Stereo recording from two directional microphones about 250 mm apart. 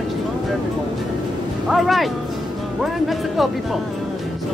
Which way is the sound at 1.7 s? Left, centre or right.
Centre.